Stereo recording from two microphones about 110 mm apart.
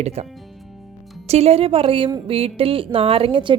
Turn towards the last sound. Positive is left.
turn(degrees=-50)  # may be behind; listen again after turning